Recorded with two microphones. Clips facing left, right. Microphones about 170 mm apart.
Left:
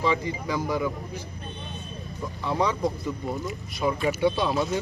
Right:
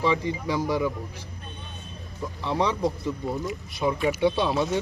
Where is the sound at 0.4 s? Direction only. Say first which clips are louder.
Right 2 dB; 20° right (ahead or behind).